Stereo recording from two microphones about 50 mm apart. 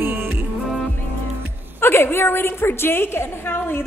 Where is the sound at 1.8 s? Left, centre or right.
Left.